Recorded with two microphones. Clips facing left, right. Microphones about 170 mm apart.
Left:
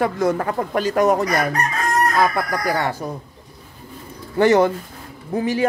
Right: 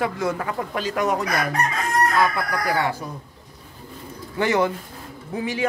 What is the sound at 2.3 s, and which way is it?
Speech, 45° left (ahead or behind).